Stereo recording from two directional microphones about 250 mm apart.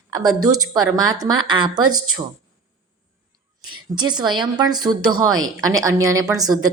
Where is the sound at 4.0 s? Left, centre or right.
Centre.